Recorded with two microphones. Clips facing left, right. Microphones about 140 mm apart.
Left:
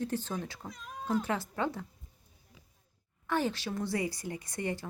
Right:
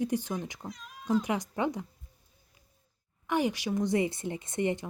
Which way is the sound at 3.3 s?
15° right (ahead or behind).